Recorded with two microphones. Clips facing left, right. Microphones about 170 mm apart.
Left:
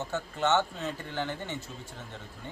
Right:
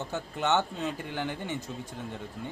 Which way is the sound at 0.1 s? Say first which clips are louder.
Left 1 dB; 15° right (ahead or behind).